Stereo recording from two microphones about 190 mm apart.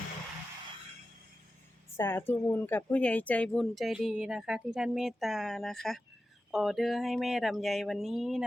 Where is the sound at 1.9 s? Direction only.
10° left (ahead or behind).